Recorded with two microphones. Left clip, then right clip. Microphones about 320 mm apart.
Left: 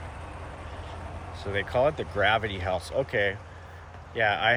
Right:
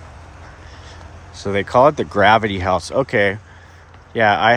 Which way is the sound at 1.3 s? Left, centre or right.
Centre.